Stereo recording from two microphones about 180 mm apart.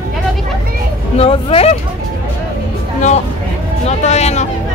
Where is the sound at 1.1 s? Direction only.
30° left (ahead or behind).